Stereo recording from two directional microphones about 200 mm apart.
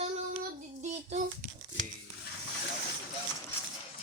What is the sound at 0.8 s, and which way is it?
Speech, 35° right (ahead or behind).